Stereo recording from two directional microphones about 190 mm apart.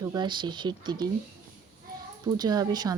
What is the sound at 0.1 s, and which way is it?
Speech, 25° right (ahead or behind).